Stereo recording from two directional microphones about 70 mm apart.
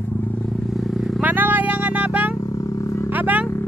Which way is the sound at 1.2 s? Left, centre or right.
Right.